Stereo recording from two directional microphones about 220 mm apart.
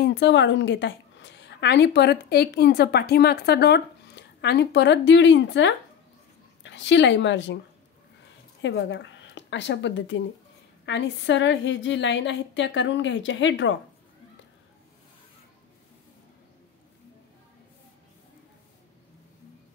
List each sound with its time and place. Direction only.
0.0 s a woman's voice: 50° left (ahead or behind)
8.6 s a woman's voice: 55° left (ahead or behind)